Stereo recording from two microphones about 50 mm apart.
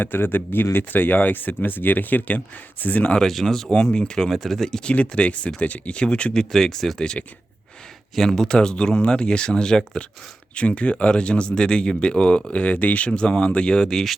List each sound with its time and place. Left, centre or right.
0.0 s speech: left
3.2 s speech: centre
4.3 s speech: centre
4.9 s speech: left
8.1 s speech: centre
8.4 s speech: centre
13.1 s speech: centre
13.8 s speech: centre